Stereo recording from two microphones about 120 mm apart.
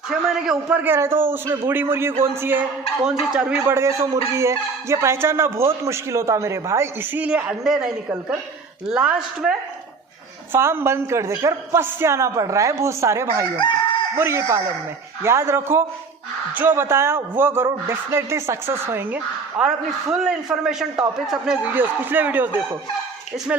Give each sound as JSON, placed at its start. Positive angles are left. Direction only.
{"t": 0.1, "sound": "a man's voice", "side_deg": -5}
{"t": 3.7, "sound": "a man's voice", "side_deg": -25}
{"t": 10.5, "sound": "a man's voice", "side_deg": -20}